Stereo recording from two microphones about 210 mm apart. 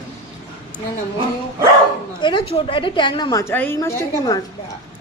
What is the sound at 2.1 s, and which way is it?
A woman's voice, 20° left (ahead or behind).